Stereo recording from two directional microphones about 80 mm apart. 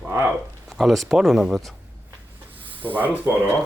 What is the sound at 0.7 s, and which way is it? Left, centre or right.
Speech, centre.